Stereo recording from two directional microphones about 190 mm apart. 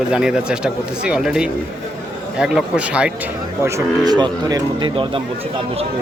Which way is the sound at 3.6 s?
15° right (ahead or behind).